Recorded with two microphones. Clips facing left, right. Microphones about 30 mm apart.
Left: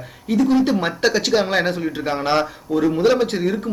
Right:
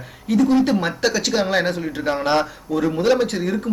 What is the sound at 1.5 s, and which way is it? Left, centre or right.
Speech, centre.